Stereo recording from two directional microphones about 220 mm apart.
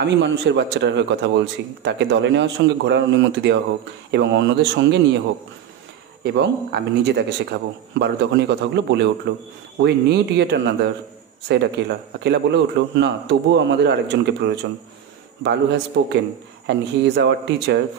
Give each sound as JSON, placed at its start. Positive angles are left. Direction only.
{"t": 0.0, "sound": "a man's voice", "side_deg": -55}
{"t": 6.2, "sound": "a man's voice", "side_deg": -50}